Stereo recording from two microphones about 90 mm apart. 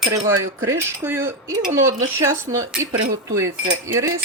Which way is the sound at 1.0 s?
25° right (ahead or behind).